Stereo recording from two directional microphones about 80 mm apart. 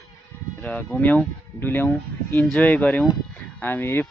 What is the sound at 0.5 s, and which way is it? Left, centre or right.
Speech, centre.